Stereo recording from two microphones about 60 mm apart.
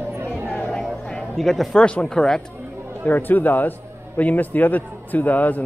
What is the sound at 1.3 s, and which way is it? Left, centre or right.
Speech, centre.